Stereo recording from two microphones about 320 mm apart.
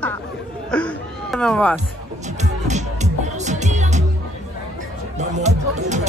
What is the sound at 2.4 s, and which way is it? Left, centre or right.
Music, right.